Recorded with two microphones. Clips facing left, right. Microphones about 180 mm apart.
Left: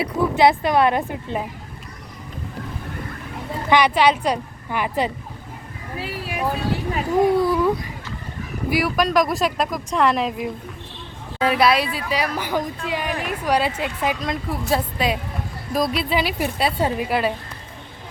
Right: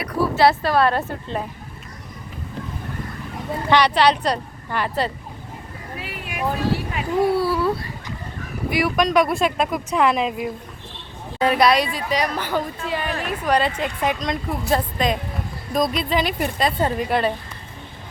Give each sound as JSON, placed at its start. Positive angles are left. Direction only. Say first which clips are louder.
{"t": 0.0, "sound": "a woman's voice", "louder": "left 1 dB", "side_deg": 15}
{"t": 3.7, "sound": "a woman's voice", "louder": "even", "side_deg": 10}
{"t": 6.0, "sound": "speech", "louder": "left 5 dB", "side_deg": 30}
{"t": 7.3, "sound": "a woman's voice", "louder": "left 2 dB", "side_deg": 15}
{"t": 8.7, "sound": "a woman's voice", "louder": "right 1 dB", "side_deg": 0}